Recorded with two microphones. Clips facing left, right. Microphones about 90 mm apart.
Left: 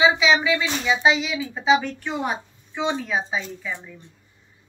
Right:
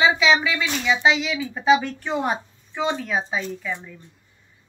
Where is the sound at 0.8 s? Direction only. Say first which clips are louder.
Even; 5° left (ahead or behind).